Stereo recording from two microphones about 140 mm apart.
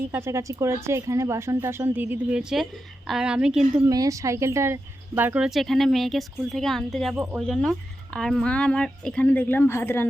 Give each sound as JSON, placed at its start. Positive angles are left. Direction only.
{"t": 0.1, "sound": "speech", "side_deg": -20}
{"t": 3.8, "sound": "speech", "side_deg": -25}